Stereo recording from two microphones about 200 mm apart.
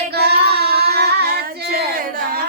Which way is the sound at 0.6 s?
55° right (ahead or behind).